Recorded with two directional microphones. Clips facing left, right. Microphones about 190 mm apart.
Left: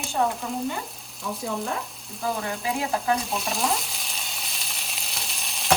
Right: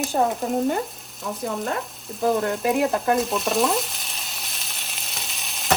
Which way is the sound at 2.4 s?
60° right (ahead or behind).